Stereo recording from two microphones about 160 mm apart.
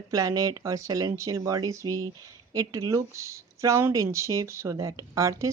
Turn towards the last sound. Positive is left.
turn(degrees=-20)  # may be behind; listen again after turning